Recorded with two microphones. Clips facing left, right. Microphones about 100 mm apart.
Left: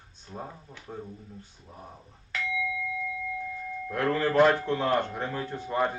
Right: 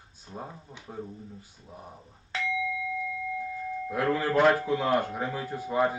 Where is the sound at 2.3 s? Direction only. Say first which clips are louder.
Right 2 dB; 30° right (ahead or behind).